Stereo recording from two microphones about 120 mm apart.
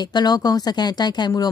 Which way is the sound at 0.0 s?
35° left (ahead or behind).